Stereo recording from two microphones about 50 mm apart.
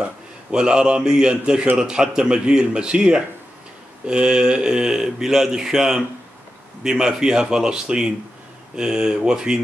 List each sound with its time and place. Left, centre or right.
0.0 s speech: centre